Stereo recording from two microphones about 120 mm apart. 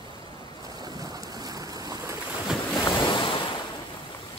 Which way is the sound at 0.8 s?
30° right (ahead or behind).